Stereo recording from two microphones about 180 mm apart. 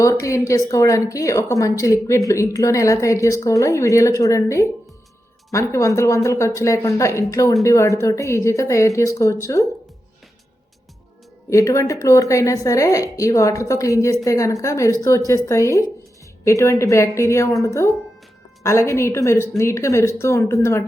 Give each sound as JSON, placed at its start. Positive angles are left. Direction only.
{"t": 0.0, "sound": "speech", "side_deg": 15}
{"t": 11.4, "sound": "speech", "side_deg": 15}